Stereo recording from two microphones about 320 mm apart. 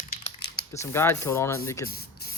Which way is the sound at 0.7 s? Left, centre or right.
Centre.